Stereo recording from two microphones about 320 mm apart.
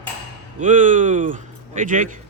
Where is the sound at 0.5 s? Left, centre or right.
Right.